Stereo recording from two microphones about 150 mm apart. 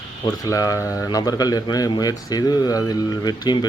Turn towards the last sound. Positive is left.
turn(degrees=25)  # may be behind; listen again after turning